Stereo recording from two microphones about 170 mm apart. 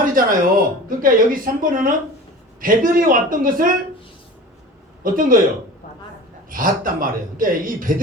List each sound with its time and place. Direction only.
0.0 s a man's voice: 55° right (ahead or behind)
5.0 s a man's voice: 55° right (ahead or behind)
6.5 s a man's voice: 55° right (ahead or behind)